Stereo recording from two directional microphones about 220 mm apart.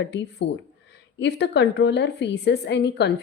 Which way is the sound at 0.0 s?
55° left (ahead or behind).